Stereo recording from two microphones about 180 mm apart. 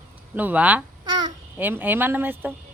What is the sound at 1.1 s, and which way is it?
Babbling, 25° right (ahead or behind).